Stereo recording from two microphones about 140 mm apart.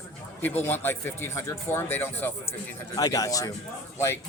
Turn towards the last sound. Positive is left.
turn(degrees=15)  # may be behind; listen again after turning